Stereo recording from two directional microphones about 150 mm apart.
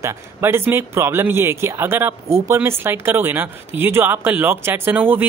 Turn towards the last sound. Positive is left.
turn(degrees=-10)  # may be behind; listen again after turning